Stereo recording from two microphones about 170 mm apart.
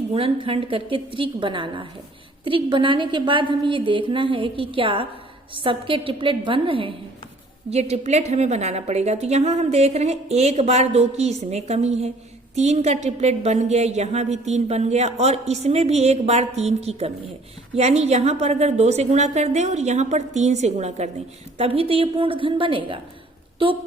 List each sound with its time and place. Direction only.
0.4 s a woman's voice: 35° right (ahead or behind)